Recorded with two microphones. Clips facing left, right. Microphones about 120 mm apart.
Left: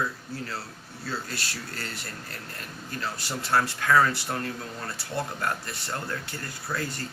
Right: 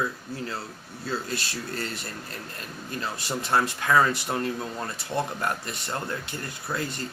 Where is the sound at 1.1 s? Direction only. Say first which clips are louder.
Right 4 dB; 20° right (ahead or behind).